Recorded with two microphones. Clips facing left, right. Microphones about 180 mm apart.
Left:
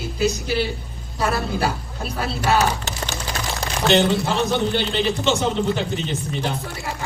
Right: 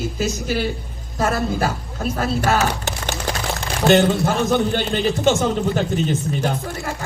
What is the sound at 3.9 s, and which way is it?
Speech, 50° right (ahead or behind).